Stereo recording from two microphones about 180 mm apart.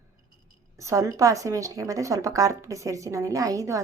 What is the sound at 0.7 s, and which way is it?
Speech, 15° right (ahead or behind).